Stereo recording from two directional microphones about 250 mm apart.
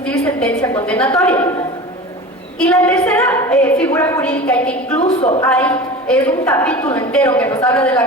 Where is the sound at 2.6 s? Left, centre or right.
Centre.